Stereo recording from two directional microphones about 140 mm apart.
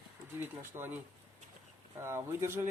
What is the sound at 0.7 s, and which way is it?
Speech, 25° right (ahead or behind).